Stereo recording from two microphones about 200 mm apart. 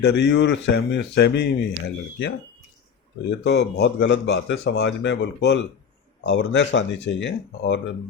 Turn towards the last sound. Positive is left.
turn(degrees=65)  # may be behind; listen again after turning